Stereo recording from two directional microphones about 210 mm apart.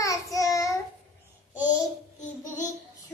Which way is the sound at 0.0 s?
15° left (ahead or behind).